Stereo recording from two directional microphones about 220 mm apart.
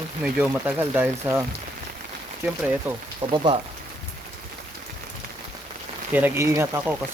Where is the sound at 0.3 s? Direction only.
10° right (ahead or behind).